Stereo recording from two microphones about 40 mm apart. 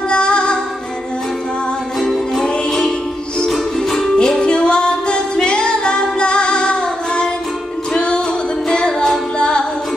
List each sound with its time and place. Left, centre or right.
0.1 s music: left
2.0 s music: centre
2.4 s music: left
9.4 s music: left